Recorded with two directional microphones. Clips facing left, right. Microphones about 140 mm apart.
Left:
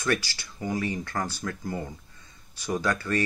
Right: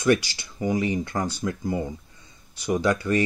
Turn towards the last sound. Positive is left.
turn(degrees=-15)  # may be behind; listen again after turning